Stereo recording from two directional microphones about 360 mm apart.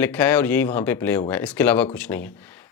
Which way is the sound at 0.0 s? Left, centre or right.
Centre.